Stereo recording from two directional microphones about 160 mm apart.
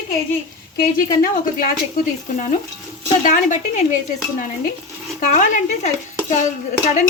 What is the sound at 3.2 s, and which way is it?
Speech, 55° left (ahead or behind).